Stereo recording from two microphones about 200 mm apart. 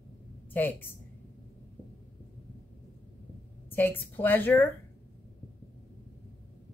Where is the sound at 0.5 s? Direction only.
10° left (ahead or behind).